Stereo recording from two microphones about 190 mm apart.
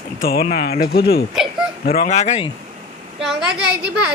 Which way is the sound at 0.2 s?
50° left (ahead or behind).